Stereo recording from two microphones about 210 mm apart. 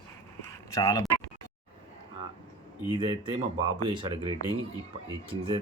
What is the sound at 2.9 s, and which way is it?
Speech, 20° right (ahead or behind).